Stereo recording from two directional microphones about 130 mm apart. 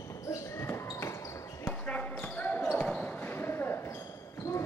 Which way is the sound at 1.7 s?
10° left (ahead or behind).